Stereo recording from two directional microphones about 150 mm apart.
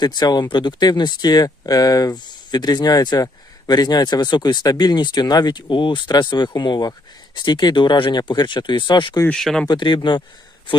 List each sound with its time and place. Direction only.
0.0 s speech: 30° left (ahead or behind)
9.3 s speech: centre (ahead or behind)
9.6 s speech: 30° left (ahead or behind)